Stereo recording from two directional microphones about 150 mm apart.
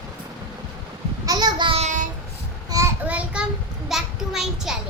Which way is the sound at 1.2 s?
25° right (ahead or behind).